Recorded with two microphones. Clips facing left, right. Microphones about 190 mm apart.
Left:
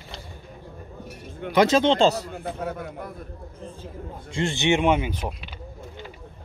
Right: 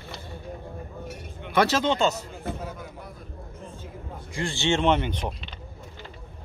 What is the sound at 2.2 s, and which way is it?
Speech, 60° left (ahead or behind).